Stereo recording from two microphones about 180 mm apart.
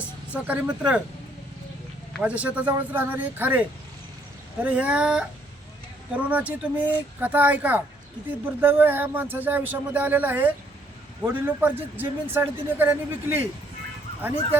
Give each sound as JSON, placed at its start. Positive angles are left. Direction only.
{"t": 0.3, "sound": "a man's voice", "side_deg": -10}
{"t": 2.2, "sound": "a man's voice", "side_deg": -5}